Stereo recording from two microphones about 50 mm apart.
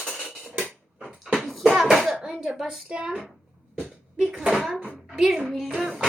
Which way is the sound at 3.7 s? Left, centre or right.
Centre.